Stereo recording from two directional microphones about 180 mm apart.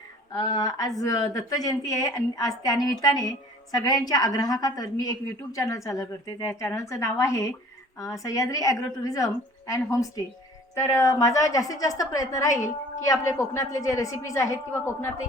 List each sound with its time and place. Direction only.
0.3 s a woman's voice: 20° left (ahead or behind)